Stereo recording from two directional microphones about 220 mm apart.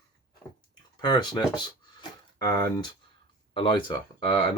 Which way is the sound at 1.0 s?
20° left (ahead or behind).